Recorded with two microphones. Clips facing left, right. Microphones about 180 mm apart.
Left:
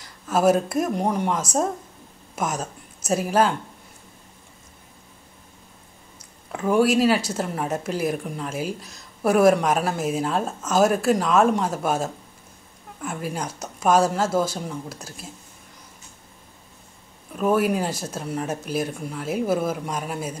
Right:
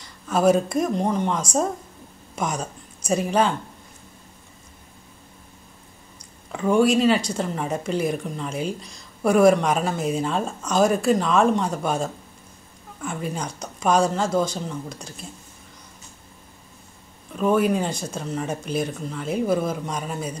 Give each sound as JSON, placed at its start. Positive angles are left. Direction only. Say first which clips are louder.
{"t": 0.3, "sound": "speech", "louder": "right 1 dB", "side_deg": 5}
{"t": 6.1, "sound": "speech", "louder": "even", "side_deg": 5}
{"t": 17.3, "sound": "speech", "louder": "right 1 dB", "side_deg": 5}